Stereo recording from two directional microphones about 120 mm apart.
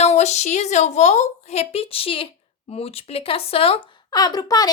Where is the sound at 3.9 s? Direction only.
40° left (ahead or behind).